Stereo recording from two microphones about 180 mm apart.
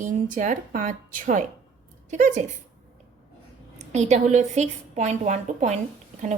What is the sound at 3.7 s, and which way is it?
A woman's voice, 40° right (ahead or behind).